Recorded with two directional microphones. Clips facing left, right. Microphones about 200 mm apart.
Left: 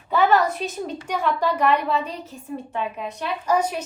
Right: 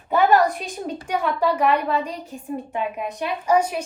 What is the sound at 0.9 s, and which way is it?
A woman's voice, 10° right (ahead or behind).